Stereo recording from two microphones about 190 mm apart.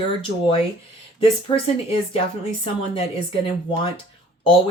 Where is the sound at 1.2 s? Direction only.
30° left (ahead or behind).